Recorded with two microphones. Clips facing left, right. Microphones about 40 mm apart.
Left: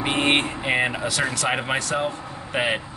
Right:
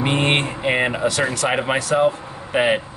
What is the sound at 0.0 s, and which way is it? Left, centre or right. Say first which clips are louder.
Speech: right 2 dB; centre.